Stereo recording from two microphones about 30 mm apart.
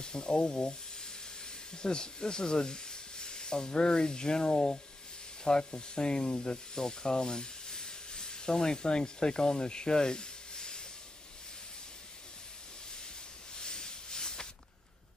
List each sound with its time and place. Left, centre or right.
0.0 s speech: left
13.6 s hiss: left